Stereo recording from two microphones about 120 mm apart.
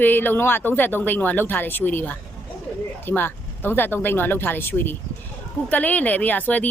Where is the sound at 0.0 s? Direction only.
15° left (ahead or behind).